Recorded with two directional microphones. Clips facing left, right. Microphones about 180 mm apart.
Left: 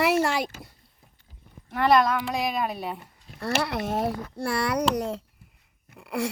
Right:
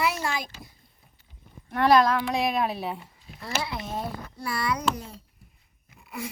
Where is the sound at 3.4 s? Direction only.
75° left (ahead or behind).